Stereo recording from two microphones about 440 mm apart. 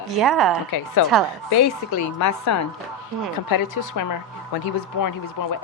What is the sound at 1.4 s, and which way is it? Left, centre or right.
A woman's voice, left.